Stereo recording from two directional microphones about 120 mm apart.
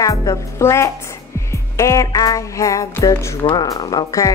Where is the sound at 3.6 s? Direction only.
35° left (ahead or behind).